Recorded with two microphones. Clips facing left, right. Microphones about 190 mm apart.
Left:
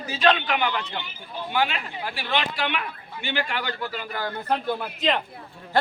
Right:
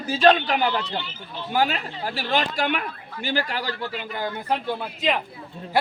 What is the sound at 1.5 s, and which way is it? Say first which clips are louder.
Speech: right 3 dB; 40° right (ahead or behind).